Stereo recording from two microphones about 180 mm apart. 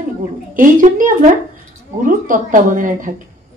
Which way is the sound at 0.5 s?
45° right (ahead or behind).